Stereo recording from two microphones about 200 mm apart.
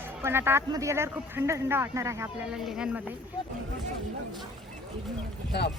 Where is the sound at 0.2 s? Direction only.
10° right (ahead or behind).